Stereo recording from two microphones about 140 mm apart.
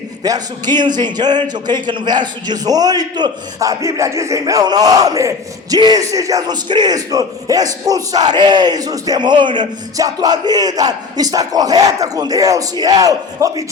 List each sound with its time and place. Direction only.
0.2 s speech: 30° right (ahead or behind)